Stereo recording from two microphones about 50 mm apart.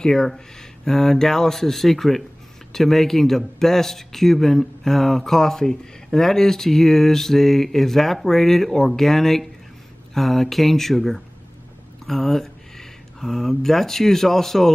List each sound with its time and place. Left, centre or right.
0.0 s speech: centre